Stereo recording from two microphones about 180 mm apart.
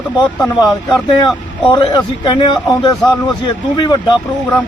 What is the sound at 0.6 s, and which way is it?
Speech, 25° left (ahead or behind).